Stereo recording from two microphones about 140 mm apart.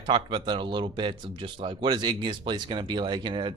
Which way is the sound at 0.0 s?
35° right (ahead or behind).